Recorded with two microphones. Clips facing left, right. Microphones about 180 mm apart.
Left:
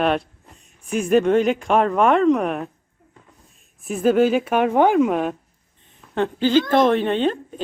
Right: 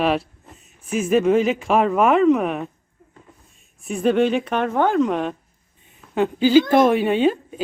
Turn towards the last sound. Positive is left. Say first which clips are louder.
# right 2 dB
turn(degrees=-5)  # may be behind; listen again after turning